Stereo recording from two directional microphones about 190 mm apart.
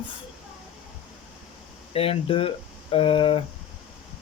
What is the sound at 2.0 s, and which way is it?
Speech, 30° left (ahead or behind).